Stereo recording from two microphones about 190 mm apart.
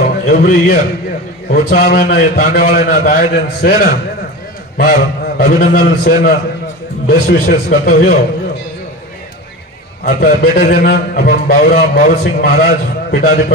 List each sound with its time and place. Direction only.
0.3 s a man's voice: 55° left (ahead or behind)
10.0 s a man's voice: 50° left (ahead or behind)